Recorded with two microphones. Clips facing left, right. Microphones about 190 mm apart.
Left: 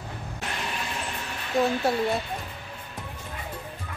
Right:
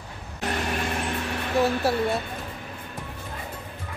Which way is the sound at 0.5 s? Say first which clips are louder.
Right 7 dB; 50° right (ahead or behind).